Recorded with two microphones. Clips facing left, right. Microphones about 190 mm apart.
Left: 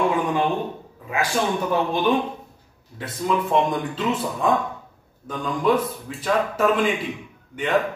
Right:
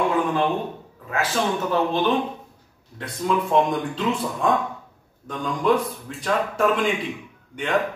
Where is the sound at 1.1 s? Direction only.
15° left (ahead or behind).